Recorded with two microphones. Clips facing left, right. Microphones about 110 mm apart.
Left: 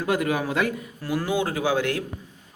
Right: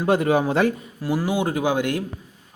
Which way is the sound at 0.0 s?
30° right (ahead or behind).